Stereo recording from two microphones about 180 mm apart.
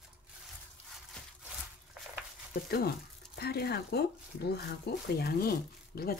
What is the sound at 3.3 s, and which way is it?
Speech, 60° left (ahead or behind).